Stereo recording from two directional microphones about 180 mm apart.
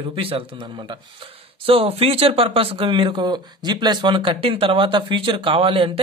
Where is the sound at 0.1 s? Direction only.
30° right (ahead or behind).